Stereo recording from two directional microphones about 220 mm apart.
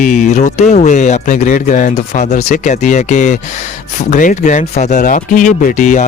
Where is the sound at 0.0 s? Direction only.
35° left (ahead or behind).